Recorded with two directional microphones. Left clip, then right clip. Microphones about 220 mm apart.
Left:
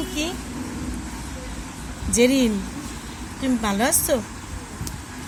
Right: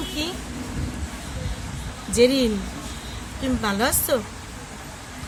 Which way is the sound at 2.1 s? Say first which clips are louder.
Right 1 dB; centre (ahead or behind).